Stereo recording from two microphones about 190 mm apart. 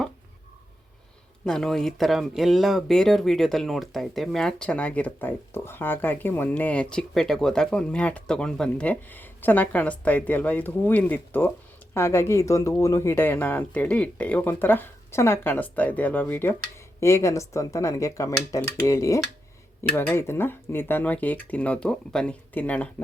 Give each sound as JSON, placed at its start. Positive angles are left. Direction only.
{"t": 1.5, "sound": "speech", "side_deg": 0}